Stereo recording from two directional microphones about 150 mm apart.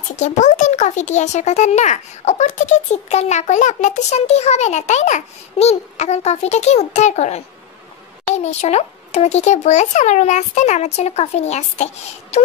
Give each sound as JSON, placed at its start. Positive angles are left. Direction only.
{"t": 0.1, "sound": "speech", "side_deg": 50}
{"t": 8.5, "sound": "speech", "side_deg": 45}